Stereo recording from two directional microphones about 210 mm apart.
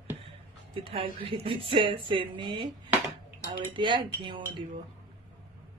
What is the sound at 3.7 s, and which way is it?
Speech, 20° right (ahead or behind).